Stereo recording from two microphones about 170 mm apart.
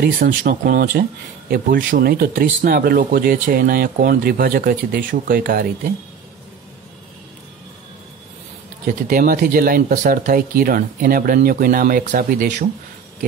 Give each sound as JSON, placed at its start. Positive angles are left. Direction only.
{"t": 0.0, "sound": "speech", "side_deg": -60}
{"t": 8.8, "sound": "speech", "side_deg": -55}